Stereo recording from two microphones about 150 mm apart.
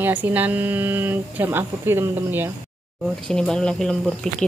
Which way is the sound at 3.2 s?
5° left (ahead or behind).